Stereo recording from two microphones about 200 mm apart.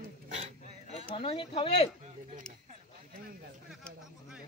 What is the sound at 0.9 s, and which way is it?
Speech, 25° left (ahead or behind).